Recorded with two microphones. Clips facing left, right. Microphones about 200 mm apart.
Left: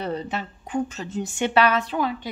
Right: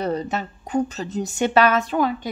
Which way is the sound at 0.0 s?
45° right (ahead or behind).